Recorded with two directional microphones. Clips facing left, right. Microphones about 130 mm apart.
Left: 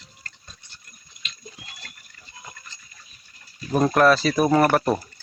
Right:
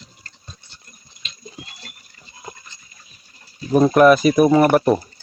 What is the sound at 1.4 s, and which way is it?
Water, 30° right (ahead or behind).